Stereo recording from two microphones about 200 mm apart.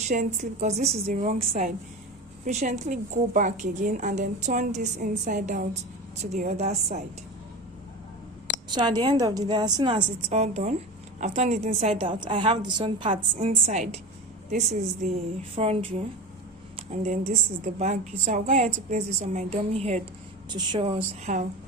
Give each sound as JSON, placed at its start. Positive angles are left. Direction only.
{"t": 0.1, "sound": "a woman's voice", "side_deg": -40}
{"t": 8.7, "sound": "a woman's voice", "side_deg": -20}
{"t": 16.7, "sound": "a sound", "side_deg": -35}
{"t": 17.6, "sound": "a woman's voice", "side_deg": -35}